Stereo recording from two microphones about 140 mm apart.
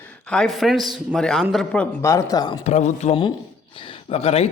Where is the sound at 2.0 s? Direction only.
20° left (ahead or behind).